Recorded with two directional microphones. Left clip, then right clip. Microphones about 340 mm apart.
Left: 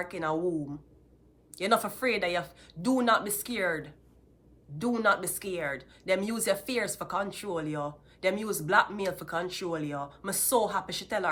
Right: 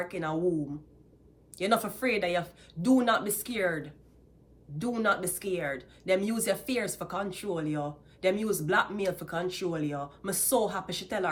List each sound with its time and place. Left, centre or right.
0.0 s speech: centre